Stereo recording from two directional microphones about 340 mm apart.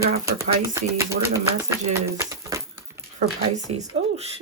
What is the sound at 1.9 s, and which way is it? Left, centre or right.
Crumpling, centre.